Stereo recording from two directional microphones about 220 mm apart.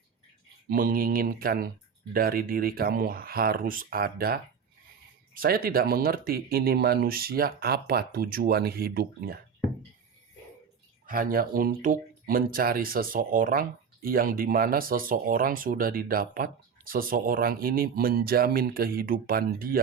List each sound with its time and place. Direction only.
0.7 s speech: 40° right (ahead or behind)
11.0 s speech: 40° right (ahead or behind)